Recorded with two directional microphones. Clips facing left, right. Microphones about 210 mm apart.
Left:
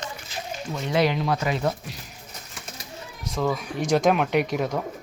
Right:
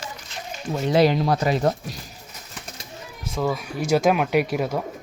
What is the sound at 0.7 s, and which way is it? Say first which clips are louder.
Speech: right 5 dB; 35° right (ahead or behind).